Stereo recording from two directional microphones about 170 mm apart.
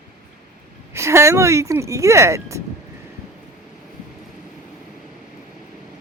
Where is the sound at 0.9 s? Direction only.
15° right (ahead or behind).